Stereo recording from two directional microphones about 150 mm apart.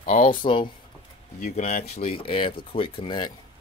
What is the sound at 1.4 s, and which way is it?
Speech, 45° left (ahead or behind).